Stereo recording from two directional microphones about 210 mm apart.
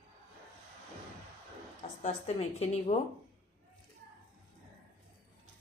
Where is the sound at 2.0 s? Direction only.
30° left (ahead or behind).